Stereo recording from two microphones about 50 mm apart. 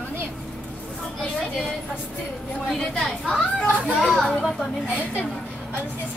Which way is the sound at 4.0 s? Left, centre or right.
Centre.